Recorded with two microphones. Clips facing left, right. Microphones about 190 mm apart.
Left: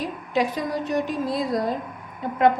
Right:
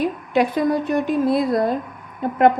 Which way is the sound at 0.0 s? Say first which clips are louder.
Right 5 dB; 60° right (ahead or behind).